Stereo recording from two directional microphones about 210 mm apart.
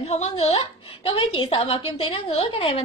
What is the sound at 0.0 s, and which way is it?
A woman's voice, 30° left (ahead or behind).